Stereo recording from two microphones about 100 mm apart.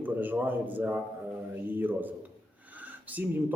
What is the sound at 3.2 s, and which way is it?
Speech, 15° right (ahead or behind).